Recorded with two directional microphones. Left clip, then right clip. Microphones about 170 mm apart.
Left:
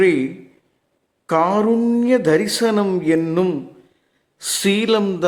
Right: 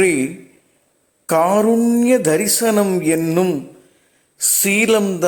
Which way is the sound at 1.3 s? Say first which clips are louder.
Right 2 dB; 10° right (ahead or behind).